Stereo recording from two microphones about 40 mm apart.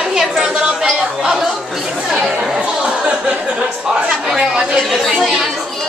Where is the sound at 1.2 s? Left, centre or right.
Centre.